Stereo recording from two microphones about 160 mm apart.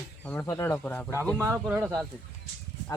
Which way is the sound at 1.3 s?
15° right (ahead or behind).